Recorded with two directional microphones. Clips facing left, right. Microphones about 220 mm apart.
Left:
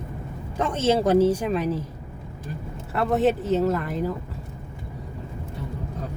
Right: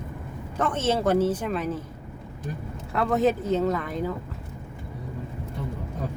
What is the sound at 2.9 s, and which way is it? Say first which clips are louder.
Speech: left 1 dB; 5° left (ahead or behind).